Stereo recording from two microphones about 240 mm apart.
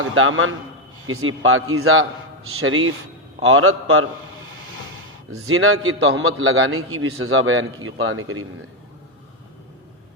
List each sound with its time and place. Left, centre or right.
0.0 s a man's voice: right
5.5 s a man's voice: right